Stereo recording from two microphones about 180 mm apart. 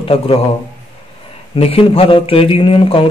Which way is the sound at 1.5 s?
30° left (ahead or behind).